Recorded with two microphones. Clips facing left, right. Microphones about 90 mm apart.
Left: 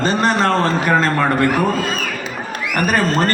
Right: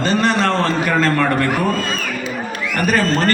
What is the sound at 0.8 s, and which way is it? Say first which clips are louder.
Speech: left 1 dB; 10° left (ahead or behind).